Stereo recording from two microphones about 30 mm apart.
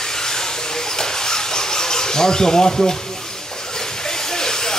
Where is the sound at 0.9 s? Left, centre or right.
Centre.